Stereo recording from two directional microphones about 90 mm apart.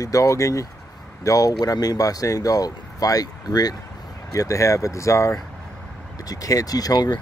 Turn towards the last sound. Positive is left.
turn(degrees=50)  # may be behind; listen again after turning